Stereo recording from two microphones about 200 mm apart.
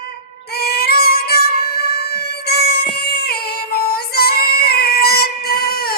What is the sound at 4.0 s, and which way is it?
Female singing, 50° left (ahead or behind).